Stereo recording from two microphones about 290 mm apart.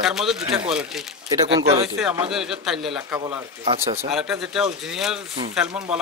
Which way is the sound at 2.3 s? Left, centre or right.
Centre.